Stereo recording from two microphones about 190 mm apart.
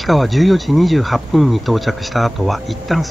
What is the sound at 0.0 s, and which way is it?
Speech, centre (ahead or behind).